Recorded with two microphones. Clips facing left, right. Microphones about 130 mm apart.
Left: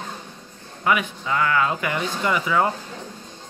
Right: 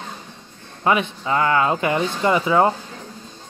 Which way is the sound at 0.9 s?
30° right (ahead or behind).